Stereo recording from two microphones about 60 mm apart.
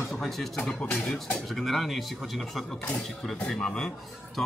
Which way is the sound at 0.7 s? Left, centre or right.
Centre.